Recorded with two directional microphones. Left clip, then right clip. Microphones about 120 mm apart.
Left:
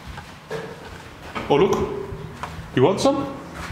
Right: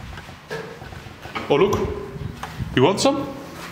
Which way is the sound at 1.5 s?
10° right (ahead or behind).